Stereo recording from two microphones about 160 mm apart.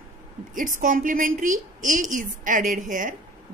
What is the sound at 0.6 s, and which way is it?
A woman's voice, 55° right (ahead or behind).